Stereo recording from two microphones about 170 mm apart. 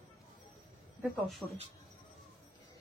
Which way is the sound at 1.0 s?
Centre (ahead or behind).